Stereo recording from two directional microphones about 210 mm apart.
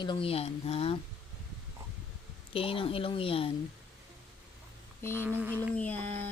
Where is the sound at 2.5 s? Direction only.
25° left (ahead or behind).